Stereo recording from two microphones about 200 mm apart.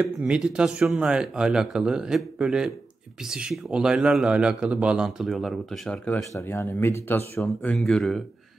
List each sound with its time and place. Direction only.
0.0 s a man's voice: 5° right (ahead or behind)